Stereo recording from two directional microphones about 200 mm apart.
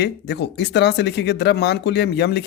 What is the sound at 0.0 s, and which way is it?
Speech, 60° left (ahead or behind).